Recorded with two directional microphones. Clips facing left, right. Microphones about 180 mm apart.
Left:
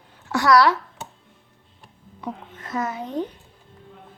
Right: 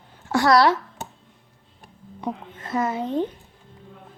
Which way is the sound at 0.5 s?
25° right (ahead or behind).